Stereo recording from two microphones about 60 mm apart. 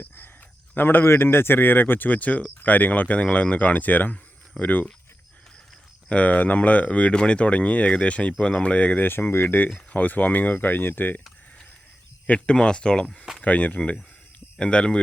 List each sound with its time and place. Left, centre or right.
0.8 s speech: left
6.1 s speech: left
12.3 s speech: centre